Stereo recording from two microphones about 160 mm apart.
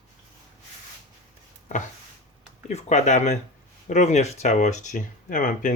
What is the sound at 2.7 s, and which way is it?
Speech, 45° left (ahead or behind).